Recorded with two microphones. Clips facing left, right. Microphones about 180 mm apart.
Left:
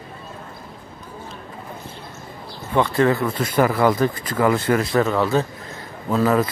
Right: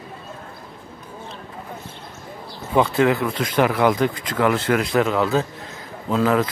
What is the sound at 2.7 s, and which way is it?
Speech, 5° right (ahead or behind).